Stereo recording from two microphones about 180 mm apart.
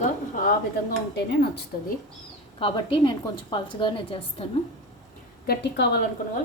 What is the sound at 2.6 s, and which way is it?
A woman's voice, 30° left (ahead or behind).